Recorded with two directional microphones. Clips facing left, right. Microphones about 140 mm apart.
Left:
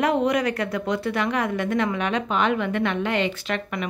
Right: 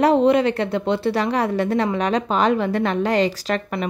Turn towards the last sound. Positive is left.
turn(degrees=-35)  # may be behind; listen again after turning